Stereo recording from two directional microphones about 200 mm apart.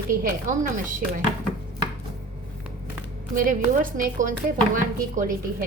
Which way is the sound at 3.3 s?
45° right (ahead or behind).